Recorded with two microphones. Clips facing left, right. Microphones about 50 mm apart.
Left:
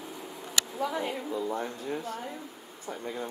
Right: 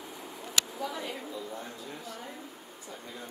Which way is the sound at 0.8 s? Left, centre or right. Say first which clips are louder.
Left 5 dB; left.